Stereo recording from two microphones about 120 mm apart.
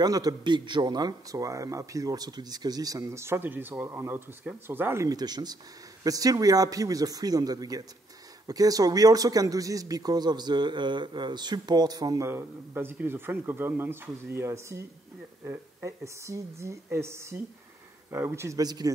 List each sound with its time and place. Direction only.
0.0 s a man's voice: 30° right (ahead or behind)